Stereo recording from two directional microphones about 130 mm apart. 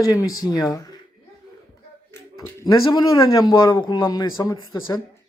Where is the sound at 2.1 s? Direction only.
20° left (ahead or behind).